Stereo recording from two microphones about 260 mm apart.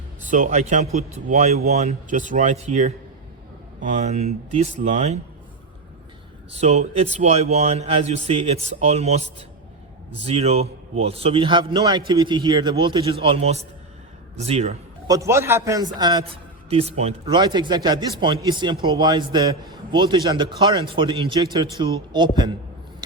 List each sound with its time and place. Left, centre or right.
0.3 s a man's voice: right
6.5 s a man's voice: right
15.1 s a man's voice: centre